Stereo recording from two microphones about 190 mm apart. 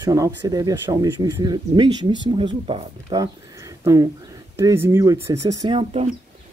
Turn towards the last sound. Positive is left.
turn(degrees=-25)  # may be behind; listen again after turning